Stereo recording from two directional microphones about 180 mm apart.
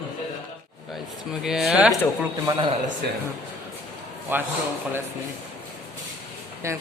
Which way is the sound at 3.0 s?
65° right (ahead or behind).